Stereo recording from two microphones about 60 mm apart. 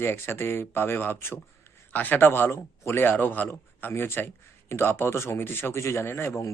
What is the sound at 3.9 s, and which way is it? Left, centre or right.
Speech, left.